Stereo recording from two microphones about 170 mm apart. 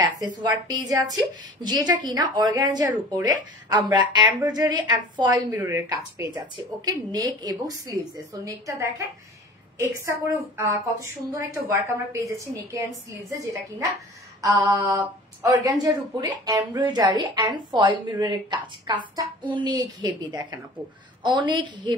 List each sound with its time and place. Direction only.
0.0 s a woman's voice: 25° right (ahead or behind)
5.6 s a woman's voice: 10° right (ahead or behind)